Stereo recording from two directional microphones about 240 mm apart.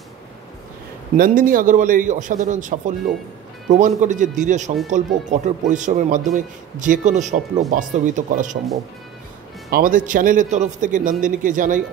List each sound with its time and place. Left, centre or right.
1.1 s a man's voice: right
9.7 s a man's voice: right